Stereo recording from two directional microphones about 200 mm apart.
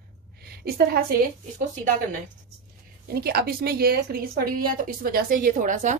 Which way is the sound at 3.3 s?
50° right (ahead or behind).